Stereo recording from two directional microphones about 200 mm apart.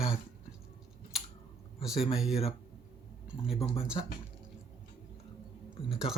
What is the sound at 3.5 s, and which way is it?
Speech, 30° left (ahead or behind).